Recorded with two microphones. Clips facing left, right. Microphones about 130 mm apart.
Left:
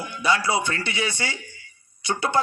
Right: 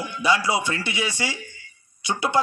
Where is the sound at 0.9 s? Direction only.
25° left (ahead or behind).